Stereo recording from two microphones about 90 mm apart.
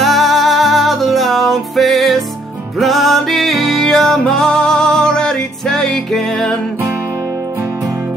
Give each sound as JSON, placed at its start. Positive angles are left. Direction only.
{"t": 0.0, "sound": "music", "side_deg": 0}